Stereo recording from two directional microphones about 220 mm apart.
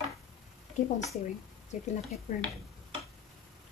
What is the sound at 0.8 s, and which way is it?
Speech, 35° left (ahead or behind).